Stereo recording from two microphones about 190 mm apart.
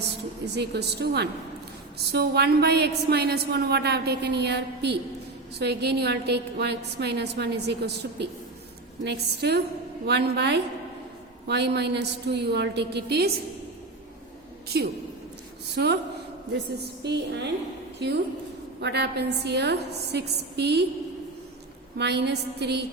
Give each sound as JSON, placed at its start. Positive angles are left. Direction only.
{"t": 0.5, "sound": "a woman's voice", "side_deg": -60}
{"t": 14.7, "sound": "a woman's voice", "side_deg": -55}
{"t": 17.0, "sound": "a woman's voice", "side_deg": -60}
{"t": 21.9, "sound": "a woman's voice", "side_deg": -60}